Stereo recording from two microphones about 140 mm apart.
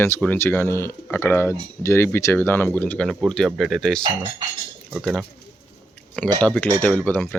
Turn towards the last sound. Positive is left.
turn(degrees=10)  # may be behind; listen again after turning